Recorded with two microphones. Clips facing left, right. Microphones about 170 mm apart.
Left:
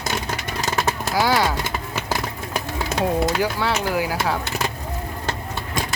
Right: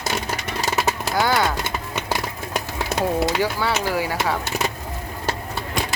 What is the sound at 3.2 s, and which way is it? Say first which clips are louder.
Speech: even; centre (ahead or behind).